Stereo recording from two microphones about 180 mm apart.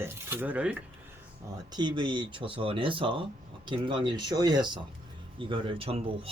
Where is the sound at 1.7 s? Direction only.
25° right (ahead or behind).